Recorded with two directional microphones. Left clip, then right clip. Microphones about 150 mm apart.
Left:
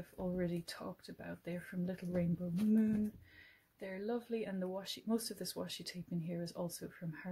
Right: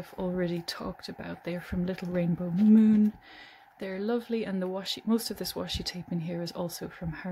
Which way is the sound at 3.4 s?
40° right (ahead or behind).